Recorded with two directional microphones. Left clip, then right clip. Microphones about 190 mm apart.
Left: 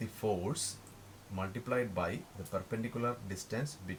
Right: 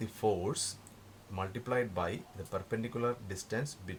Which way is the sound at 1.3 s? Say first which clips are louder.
Right 1 dB; 45° right (ahead or behind).